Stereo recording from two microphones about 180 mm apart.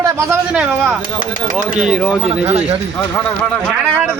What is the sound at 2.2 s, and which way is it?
Speech, 35° right (ahead or behind).